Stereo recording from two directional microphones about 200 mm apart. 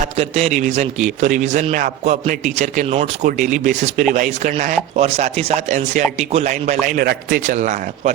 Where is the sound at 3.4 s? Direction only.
5° right (ahead or behind).